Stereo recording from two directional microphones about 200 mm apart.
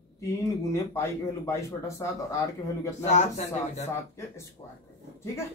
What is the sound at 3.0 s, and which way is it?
Speech, 35° left (ahead or behind).